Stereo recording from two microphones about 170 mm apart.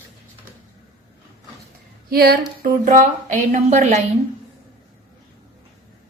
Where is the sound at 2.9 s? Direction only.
45° right (ahead or behind).